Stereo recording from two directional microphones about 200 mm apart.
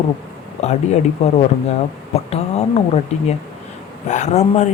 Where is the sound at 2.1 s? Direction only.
30° left (ahead or behind).